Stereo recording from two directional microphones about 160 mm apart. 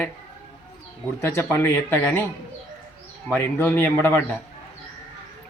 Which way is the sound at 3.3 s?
10° left (ahead or behind).